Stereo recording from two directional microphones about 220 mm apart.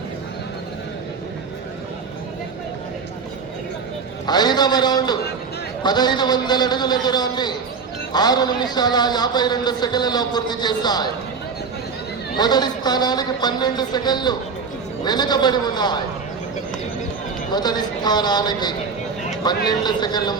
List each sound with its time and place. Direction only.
4.3 s a man's voice: 20° left (ahead or behind)
12.4 s a man's voice: 20° left (ahead or behind)
17.5 s a man's voice: 20° left (ahead or behind)